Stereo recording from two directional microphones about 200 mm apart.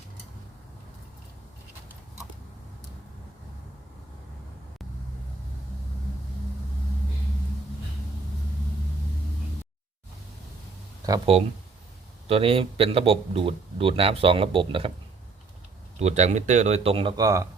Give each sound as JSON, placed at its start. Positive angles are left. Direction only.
{"t": 11.3, "sound": "speech", "side_deg": -30}
{"t": 16.0, "sound": "speech", "side_deg": -35}